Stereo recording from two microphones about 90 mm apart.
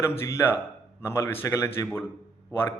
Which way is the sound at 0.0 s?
30° left (ahead or behind).